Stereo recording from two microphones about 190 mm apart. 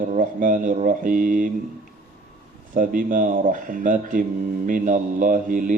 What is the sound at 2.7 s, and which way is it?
Speech, 45° right (ahead or behind).